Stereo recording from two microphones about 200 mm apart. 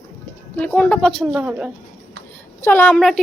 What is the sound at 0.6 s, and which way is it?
Speech, 5° left (ahead or behind).